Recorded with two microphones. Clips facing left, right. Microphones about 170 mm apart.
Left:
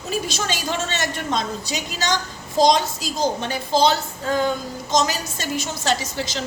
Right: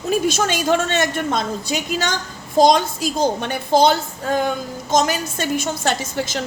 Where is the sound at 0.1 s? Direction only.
50° right (ahead or behind).